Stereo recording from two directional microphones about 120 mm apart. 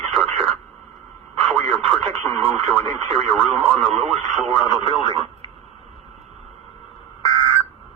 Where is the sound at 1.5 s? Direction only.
55° right (ahead or behind).